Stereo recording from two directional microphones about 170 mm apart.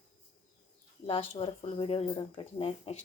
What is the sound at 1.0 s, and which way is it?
Speech, 35° left (ahead or behind).